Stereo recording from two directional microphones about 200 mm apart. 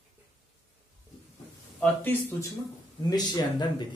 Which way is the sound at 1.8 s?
10° left (ahead or behind).